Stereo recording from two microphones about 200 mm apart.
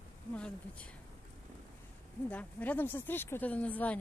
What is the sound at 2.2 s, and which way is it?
Speech, 5° left (ahead or behind).